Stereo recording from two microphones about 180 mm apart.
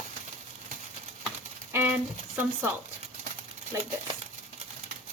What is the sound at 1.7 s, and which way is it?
Speech, 10° right (ahead or behind).